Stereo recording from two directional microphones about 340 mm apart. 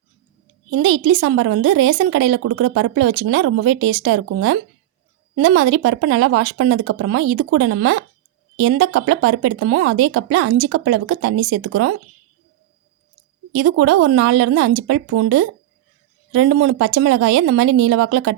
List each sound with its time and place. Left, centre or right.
0.8 s speech: right
13.5 s speech: right